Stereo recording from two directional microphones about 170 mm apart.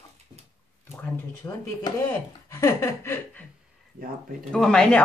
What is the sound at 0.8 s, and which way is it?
Speech, 15° left (ahead or behind).